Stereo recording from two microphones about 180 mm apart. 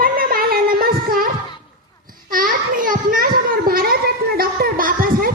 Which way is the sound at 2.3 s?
50° right (ahead or behind).